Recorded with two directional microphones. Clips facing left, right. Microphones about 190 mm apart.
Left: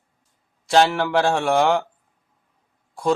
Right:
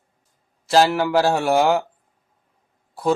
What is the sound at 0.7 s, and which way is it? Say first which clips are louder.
Speech: right 1 dB; 5° right (ahead or behind).